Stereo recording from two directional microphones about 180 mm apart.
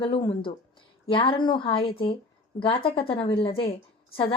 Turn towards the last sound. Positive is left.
turn(degrees=30)  # may be behind; listen again after turning